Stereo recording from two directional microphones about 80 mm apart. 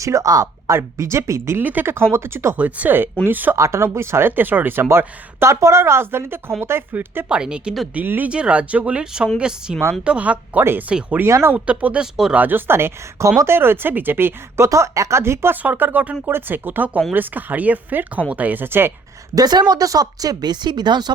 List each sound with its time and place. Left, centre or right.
0.0 s speech: right
0.7 s speech: right
1.6 s speech: right
2.6 s speech: centre
3.5 s speech: right
7.3 s speech: centre
7.9 s speech: right
10.6 s speech: right
10.8 s speech: centre
11.3 s speech: right
11.5 s speech: centre
12.4 s speech: right
15.6 s speech: right
19.4 s a woman's voice: right